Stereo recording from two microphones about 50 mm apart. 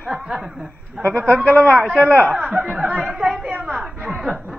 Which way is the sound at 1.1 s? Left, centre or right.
Left.